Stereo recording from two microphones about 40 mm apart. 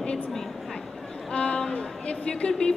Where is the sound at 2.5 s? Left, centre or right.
Left.